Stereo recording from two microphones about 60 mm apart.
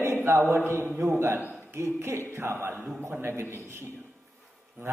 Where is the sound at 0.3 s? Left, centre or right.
Right.